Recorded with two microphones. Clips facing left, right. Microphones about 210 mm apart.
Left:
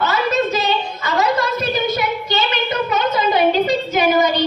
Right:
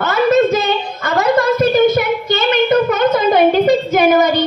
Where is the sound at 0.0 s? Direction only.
50° right (ahead or behind).